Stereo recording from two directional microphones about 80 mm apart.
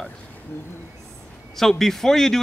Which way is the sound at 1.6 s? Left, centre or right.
Centre.